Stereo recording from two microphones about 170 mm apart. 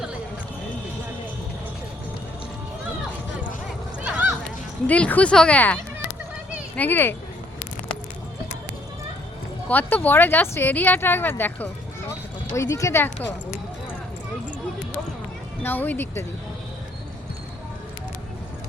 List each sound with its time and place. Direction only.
4.0 s a sound: 10° right (ahead or behind)
4.9 s speech: 10° left (ahead or behind)
9.6 s speech: 10° left (ahead or behind)
15.6 s speech: 10° left (ahead or behind)